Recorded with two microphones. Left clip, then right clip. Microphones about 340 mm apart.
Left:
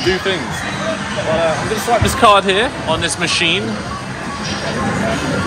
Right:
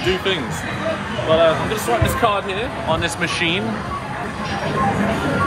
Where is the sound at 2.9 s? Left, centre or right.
Centre.